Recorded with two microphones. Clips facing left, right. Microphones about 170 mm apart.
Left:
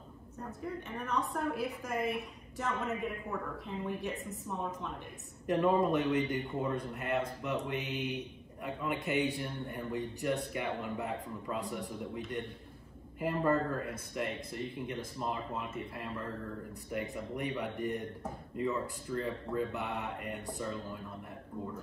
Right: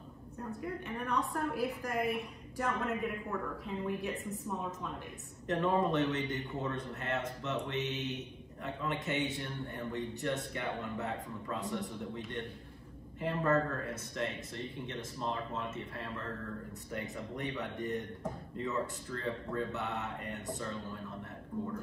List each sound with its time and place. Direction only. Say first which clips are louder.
0.6 s a woman's voice: even; centre (ahead or behind)
5.5 s a man's voice: left 2 dB; 10° left (ahead or behind)
19.1 s a man's voice: left 5 dB; 15° left (ahead or behind)